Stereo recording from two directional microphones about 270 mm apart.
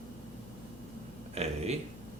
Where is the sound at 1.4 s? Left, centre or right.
Right.